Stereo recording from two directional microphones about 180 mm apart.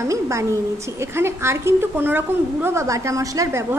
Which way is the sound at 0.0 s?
15° right (ahead or behind).